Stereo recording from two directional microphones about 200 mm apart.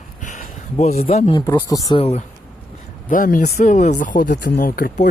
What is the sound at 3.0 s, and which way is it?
Speech, 40° left (ahead or behind).